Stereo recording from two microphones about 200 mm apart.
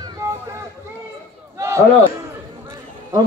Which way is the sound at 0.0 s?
15° right (ahead or behind).